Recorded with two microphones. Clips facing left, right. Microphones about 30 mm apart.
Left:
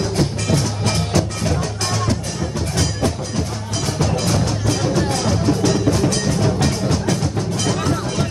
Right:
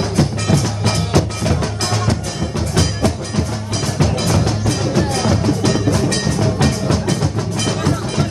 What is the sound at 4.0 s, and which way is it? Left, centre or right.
Music, centre.